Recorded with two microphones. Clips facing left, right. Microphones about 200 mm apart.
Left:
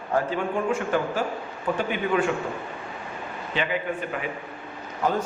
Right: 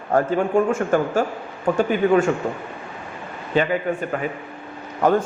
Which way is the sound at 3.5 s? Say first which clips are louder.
Right 7 dB; 45° right (ahead or behind).